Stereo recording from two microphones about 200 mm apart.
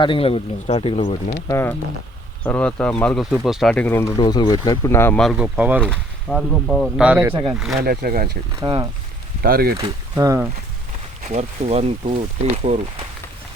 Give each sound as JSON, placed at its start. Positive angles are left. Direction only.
{"t": 0.0, "sound": "speech", "side_deg": 25}
{"t": 1.5, "sound": "speech", "side_deg": 15}
{"t": 5.8, "sound": "speech", "side_deg": 5}
{"t": 7.1, "sound": "speech", "side_deg": -10}
{"t": 7.9, "sound": "speech", "side_deg": -45}
{"t": 8.5, "sound": "speech", "side_deg": -20}
{"t": 9.4, "sound": "speech", "side_deg": -50}
{"t": 9.7, "sound": "speech", "side_deg": -15}
{"t": 11.2, "sound": "speech", "side_deg": -35}